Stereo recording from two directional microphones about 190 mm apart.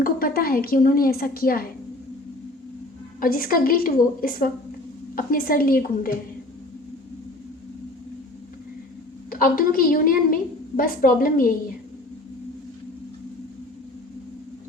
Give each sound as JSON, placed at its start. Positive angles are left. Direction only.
{"t": 0.0, "sound": "a woman's voice", "side_deg": 50}
{"t": 3.2, "sound": "a woman's voice", "side_deg": 50}
{"t": 9.3, "sound": "a woman's voice", "side_deg": 50}